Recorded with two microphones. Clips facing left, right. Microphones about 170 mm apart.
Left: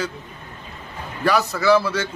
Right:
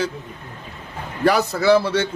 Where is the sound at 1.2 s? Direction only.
35° right (ahead or behind).